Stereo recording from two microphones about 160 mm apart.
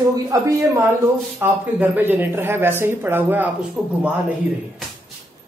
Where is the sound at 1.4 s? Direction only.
10° right (ahead or behind).